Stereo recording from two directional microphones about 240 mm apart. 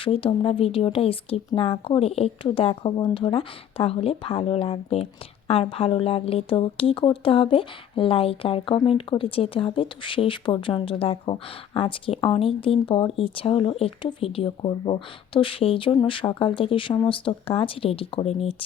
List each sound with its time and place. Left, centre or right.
0.0 s speech: left